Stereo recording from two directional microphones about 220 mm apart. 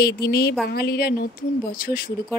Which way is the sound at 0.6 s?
45° left (ahead or behind).